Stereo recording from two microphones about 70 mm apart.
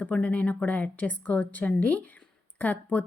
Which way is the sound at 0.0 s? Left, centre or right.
Centre.